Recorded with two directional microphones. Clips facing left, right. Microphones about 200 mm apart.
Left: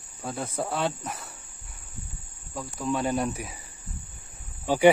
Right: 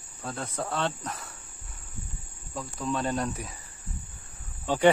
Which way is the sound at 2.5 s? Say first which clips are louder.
Left 2 dB; 5° left (ahead or behind).